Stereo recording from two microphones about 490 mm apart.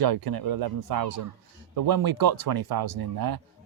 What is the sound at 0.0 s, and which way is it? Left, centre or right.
A man's voice, right.